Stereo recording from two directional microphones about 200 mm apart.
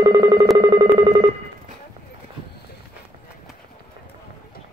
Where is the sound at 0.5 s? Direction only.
20° right (ahead or behind).